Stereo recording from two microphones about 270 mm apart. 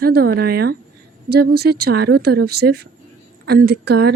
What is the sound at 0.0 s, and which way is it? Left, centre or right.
Speech, right.